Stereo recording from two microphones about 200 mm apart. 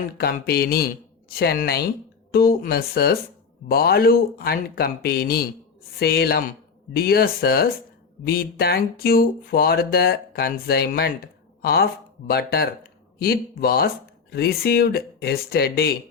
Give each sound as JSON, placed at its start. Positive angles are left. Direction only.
{"t": 0.2, "sound": "speech", "side_deg": 50}